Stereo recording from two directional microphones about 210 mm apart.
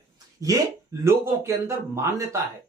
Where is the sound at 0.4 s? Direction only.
15° right (ahead or behind).